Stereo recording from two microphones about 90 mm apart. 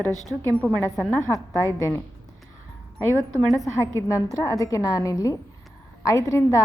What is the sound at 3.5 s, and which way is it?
A woman's voice, 35° left (ahead or behind).